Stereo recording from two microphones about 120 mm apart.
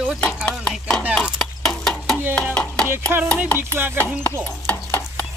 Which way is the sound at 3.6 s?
20° right (ahead or behind).